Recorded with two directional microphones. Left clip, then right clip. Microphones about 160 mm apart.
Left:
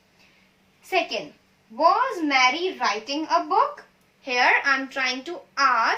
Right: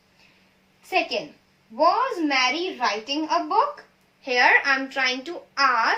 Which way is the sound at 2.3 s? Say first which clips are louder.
Left 6 dB; 20° right (ahead or behind).